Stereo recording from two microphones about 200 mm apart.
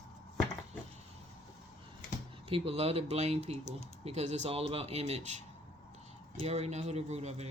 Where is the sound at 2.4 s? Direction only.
30° right (ahead or behind).